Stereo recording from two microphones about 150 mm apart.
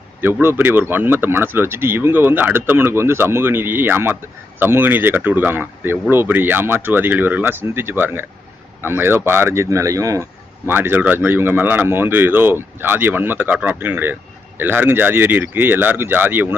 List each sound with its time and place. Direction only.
0.4 s speech: 15° right (ahead or behind)